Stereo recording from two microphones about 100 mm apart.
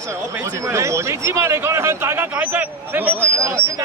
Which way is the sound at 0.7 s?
30° right (ahead or behind).